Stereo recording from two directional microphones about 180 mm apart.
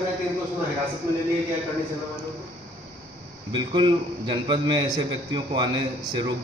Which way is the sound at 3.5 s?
25° right (ahead or behind).